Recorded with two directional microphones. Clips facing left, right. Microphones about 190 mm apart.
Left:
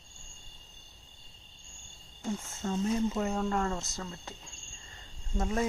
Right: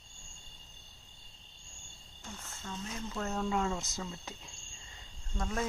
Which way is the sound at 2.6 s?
45° left (ahead or behind).